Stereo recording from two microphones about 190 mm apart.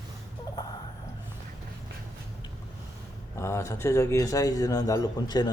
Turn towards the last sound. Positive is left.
turn(degrees=20)  # may be behind; listen again after turning